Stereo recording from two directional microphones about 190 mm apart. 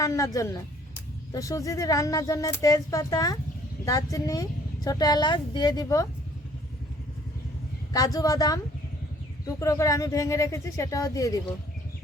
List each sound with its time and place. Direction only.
0.0 s a woman's voice: 15° left (ahead or behind)
7.9 s a woman's voice: 20° left (ahead or behind)